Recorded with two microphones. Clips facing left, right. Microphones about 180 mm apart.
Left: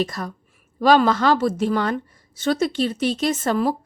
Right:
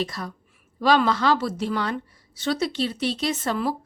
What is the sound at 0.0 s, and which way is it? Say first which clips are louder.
A woman's voice: left 4 dB; 50° left (ahead or behind).